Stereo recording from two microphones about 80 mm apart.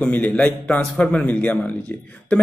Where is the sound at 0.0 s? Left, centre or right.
Centre.